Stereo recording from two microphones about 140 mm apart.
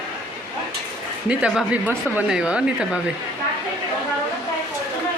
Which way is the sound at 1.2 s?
10° right (ahead or behind).